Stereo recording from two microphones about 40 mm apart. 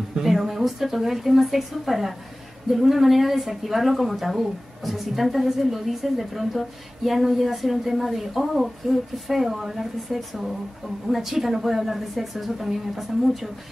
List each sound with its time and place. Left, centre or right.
0.2 s speech: centre